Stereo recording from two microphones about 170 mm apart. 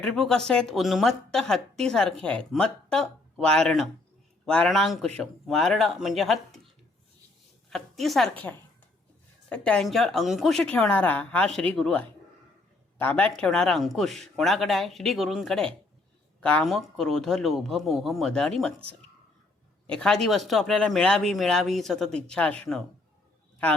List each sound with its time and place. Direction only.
0.0 s a woman's voice: 5° left (ahead or behind)
7.7 s a woman's voice: centre (ahead or behind)
19.9 s a woman's voice: 5° left (ahead or behind)